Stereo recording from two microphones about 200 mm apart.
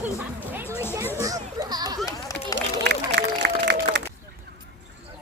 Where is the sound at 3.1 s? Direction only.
55° right (ahead or behind).